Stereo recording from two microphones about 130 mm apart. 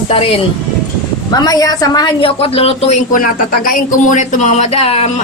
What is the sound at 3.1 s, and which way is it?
Speech, 90° left.